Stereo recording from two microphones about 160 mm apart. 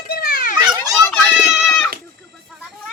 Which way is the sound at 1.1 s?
5° left (ahead or behind).